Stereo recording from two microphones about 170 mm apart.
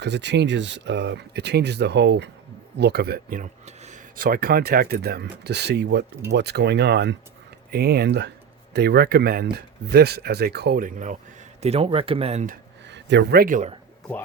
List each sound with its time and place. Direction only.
0.0 s speech: 90° right
2.7 s speech: 75° right (ahead or behind)
7.7 s speech: 70° right (ahead or behind); by 11.2 s 50° right (ahead or behind)
11.6 s speech: 35° right (ahead or behind)
12.9 s speech: 90° right; by 13.7 s 55° right (ahead or behind)